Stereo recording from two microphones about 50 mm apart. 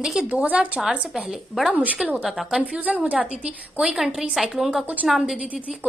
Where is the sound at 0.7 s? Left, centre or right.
Centre.